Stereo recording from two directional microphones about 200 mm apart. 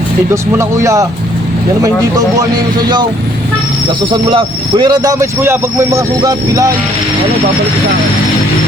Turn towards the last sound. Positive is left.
turn(degrees=-20)  # may be behind; listen again after turning